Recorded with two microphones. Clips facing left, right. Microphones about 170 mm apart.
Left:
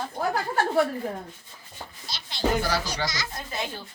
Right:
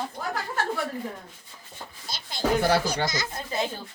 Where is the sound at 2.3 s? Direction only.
55° right (ahead or behind).